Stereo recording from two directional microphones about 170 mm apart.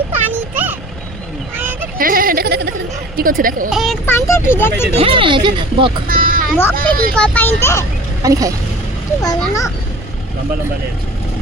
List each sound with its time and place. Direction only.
0.5 s vehicle: 10° right (ahead or behind)
2.0 s a sound: 55° right (ahead or behind)
3.2 s speech: 55° right (ahead or behind)
3.7 s speech: centre (ahead or behind)
4.0 s speech: 15° left (ahead or behind)
4.9 s speech: 30° right (ahead or behind)
6.1 s a sound: 55° right (ahead or behind)
6.7 s speech: 60° right (ahead or behind)
7.2 s speech: 10° left (ahead or behind)
8.2 s speech: 20° right (ahead or behind)
9.2 s a child's voice: 20° left (ahead or behind)